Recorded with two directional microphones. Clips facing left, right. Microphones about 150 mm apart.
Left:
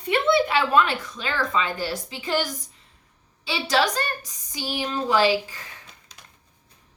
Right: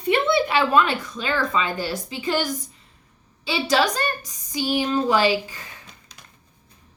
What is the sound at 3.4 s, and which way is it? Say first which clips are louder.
A woman's voice: right 2 dB; 15° right (ahead or behind).